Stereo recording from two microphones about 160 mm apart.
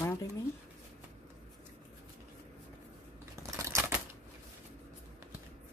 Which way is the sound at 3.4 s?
20° right (ahead or behind).